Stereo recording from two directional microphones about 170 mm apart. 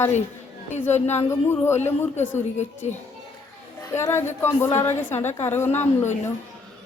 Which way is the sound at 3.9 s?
15° left (ahead or behind).